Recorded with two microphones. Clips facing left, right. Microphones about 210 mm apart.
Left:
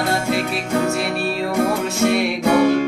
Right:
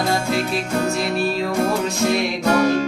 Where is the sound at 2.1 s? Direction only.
10° left (ahead or behind).